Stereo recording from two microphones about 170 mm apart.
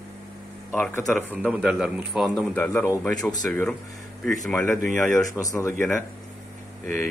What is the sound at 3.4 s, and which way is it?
Speech, 5° left (ahead or behind).